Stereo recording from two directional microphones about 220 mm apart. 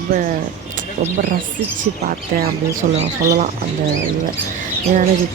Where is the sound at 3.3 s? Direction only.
35° right (ahead or behind).